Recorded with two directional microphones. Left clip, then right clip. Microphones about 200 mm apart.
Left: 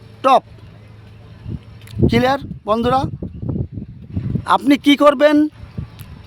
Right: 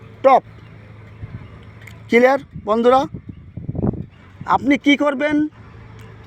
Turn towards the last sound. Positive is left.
turn(degrees=30)  # may be behind; listen again after turning